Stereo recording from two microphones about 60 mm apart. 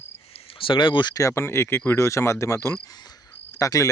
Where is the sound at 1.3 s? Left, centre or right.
Left.